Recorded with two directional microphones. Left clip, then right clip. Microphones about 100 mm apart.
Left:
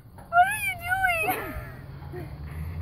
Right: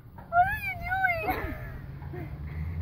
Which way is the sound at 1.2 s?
15° left (ahead or behind).